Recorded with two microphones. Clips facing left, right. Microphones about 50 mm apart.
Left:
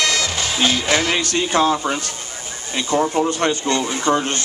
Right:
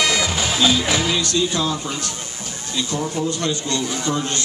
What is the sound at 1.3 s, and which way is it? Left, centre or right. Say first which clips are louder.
Speech: left 4 dB; left.